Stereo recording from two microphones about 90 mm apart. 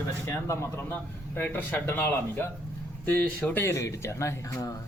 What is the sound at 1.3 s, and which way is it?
Speech, 25° left (ahead or behind).